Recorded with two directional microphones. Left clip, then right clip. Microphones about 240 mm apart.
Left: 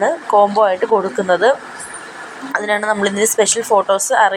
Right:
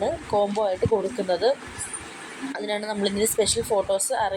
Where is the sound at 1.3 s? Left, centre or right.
Centre.